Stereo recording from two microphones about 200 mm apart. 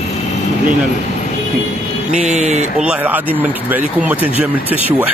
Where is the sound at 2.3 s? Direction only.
35° right (ahead or behind).